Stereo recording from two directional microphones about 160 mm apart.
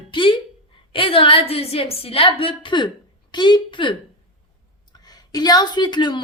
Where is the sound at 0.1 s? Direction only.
30° left (ahead or behind).